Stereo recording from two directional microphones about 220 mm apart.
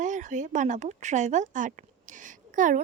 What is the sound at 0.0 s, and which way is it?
Speech, 35° right (ahead or behind).